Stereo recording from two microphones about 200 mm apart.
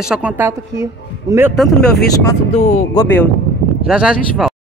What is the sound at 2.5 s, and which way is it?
Speech, 30° left (ahead or behind).